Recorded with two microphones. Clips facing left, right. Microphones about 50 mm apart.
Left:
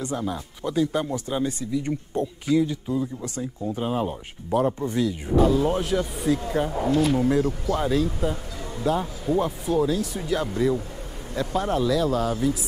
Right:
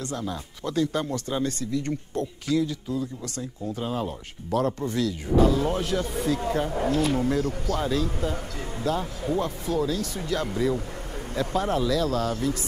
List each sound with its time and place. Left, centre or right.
0.0 s speech: centre
5.4 s speech: centre